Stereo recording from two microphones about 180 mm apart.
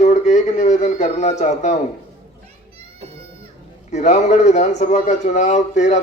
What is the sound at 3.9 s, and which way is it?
A man's voice, 40° left (ahead or behind).